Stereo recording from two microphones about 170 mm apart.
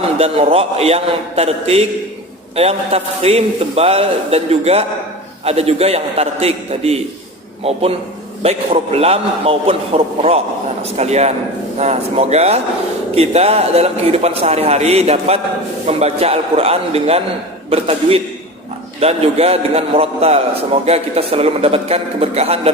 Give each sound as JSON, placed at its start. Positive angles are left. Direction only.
{"t": 0.2, "sound": "a man's voice", "side_deg": -35}